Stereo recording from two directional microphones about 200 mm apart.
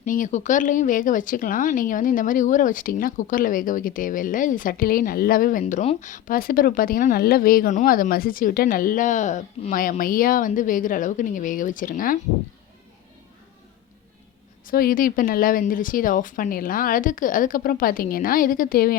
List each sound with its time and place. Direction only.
0.0 s speech: 40° left (ahead or behind)
14.7 s speech: 45° left (ahead or behind)